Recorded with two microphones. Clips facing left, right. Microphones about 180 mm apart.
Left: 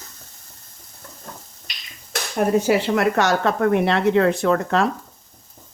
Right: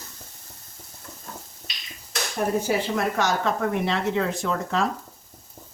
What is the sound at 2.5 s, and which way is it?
Speech, 75° left (ahead or behind).